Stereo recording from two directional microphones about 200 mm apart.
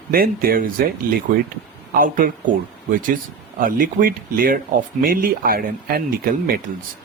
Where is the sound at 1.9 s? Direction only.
45° right (ahead or behind).